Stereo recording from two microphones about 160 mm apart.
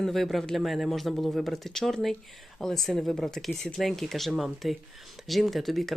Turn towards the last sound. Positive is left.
turn(degrees=0)  # may be behind; listen again after turning